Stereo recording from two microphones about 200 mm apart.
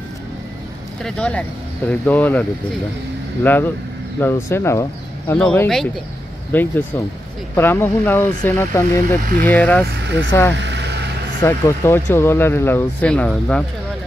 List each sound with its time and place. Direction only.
1.0 s speech: 5° left (ahead or behind)
3.4 s speech: 10° left (ahead or behind)
9.8 s speech: 60° right (ahead or behind)
11.4 s speech: 10° left (ahead or behind)